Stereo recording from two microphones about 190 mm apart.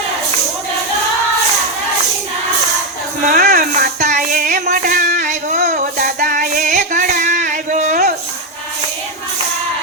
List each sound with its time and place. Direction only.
3.2 s music: 45° right (ahead or behind)
5.6 s child singing: 45° right (ahead or behind)